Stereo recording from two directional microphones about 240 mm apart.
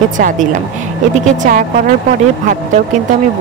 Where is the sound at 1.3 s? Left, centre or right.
Right.